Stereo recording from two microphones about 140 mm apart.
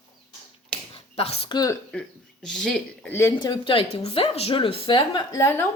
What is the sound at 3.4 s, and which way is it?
Speech, 35° left (ahead or behind).